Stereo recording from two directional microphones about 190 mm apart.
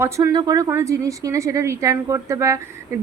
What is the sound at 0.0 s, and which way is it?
A woman's voice, 15° right (ahead or behind).